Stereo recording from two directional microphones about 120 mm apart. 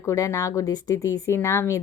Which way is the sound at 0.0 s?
25° left (ahead or behind).